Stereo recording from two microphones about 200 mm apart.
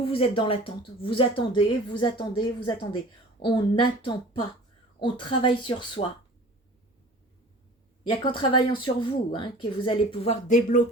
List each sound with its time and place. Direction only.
0.0 s speech: 30° left (ahead or behind)
8.0 s speech: 25° left (ahead or behind)